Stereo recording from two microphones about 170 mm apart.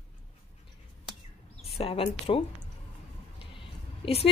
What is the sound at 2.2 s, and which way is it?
A woman's voice, 30° left (ahead or behind).